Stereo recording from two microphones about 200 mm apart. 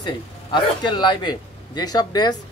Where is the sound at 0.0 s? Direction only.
20° left (ahead or behind).